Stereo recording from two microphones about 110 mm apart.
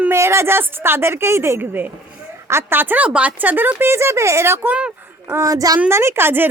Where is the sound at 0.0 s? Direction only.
25° right (ahead or behind).